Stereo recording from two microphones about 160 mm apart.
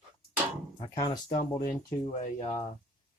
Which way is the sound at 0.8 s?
30° left (ahead or behind).